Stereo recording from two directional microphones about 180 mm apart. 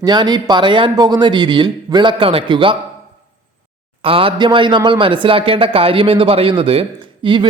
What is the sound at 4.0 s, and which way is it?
A man's voice, 30° right (ahead or behind).